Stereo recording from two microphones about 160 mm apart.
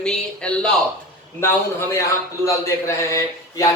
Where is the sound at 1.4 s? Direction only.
15° left (ahead or behind).